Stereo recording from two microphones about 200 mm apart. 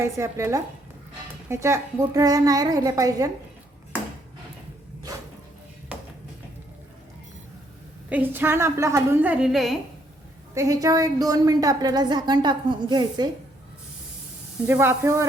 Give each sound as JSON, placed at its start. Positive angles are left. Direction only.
{"t": 0.0, "sound": "a woman's voice", "side_deg": -15}
{"t": 8.1, "sound": "a woman's voice", "side_deg": -10}
{"t": 10.5, "sound": "a woman's voice", "side_deg": -15}
{"t": 14.7, "sound": "a woman's voice", "side_deg": -10}